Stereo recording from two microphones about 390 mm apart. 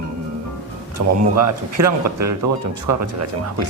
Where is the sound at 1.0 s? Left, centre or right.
Right.